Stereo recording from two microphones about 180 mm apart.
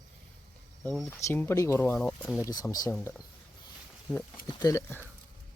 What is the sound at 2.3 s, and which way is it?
Speech, 20° left (ahead or behind).